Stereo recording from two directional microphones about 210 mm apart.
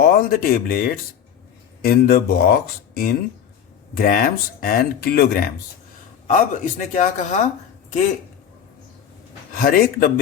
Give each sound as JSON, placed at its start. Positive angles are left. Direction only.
{"t": 0.0, "sound": "a man's voice", "side_deg": 45}
{"t": 9.6, "sound": "speech", "side_deg": 45}